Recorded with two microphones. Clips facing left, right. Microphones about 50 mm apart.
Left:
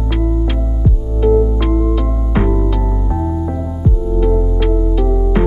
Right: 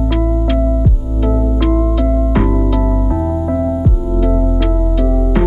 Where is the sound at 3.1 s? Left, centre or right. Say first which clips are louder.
Right 3 dB; centre.